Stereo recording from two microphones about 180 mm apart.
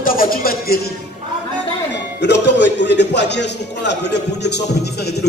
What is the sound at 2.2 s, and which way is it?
A man's voice, 75° left (ahead or behind).